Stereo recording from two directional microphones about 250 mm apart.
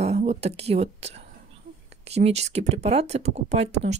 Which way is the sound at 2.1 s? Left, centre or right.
Right.